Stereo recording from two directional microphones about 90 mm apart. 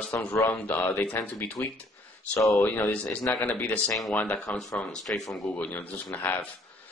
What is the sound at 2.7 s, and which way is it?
Speech, 20° left (ahead or behind).